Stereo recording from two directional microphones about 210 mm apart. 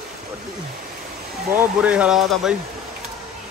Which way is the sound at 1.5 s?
10° right (ahead or behind).